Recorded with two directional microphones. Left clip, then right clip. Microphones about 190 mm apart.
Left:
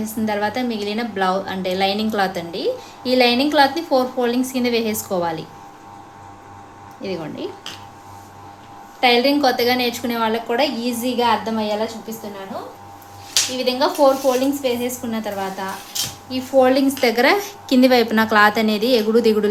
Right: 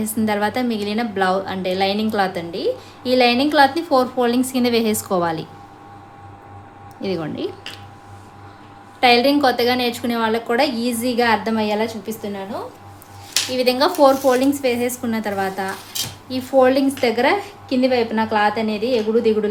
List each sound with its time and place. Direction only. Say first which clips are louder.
0.0 s a woman's voice: right 1 dB; 20° right (ahead or behind)
7.0 s a woman's voice: right 3 dB; 25° right (ahead or behind)
9.0 s a woman's voice: right 1 dB; 20° right (ahead or behind)
13.6 s a woman's voice: right 3 dB; 30° right (ahead or behind)
16.6 s a woman's voice: even; 10° right (ahead or behind); by 19.5 s 15° left (ahead or behind)